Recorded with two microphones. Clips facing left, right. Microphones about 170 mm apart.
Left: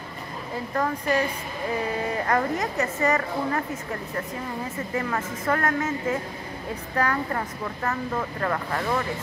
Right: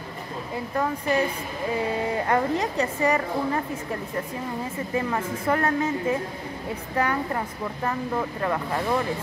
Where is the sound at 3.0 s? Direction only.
15° right (ahead or behind).